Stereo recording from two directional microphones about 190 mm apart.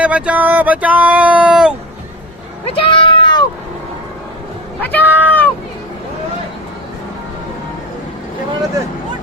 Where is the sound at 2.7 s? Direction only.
30° left (ahead or behind).